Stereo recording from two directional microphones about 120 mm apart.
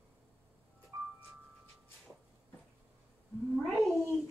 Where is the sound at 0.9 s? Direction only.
25° right (ahead or behind).